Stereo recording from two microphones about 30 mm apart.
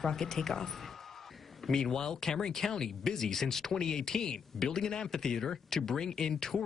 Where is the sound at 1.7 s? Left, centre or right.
Centre.